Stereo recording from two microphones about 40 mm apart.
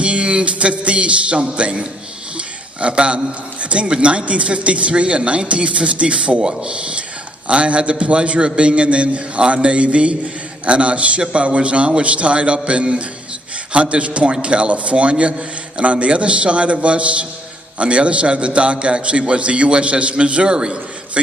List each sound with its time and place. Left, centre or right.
0.0 s a man's voice: right